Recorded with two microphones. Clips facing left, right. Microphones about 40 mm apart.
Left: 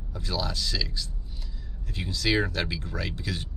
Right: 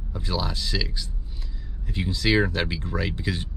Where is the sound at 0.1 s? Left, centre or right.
Right.